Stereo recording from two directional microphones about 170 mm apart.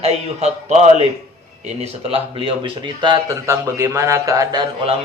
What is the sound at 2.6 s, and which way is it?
A man's voice, 25° right (ahead or behind).